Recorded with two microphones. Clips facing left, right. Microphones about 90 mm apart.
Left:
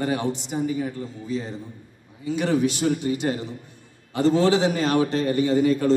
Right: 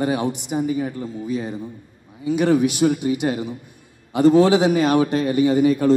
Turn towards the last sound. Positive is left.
turn(degrees=-15)  # may be behind; listen again after turning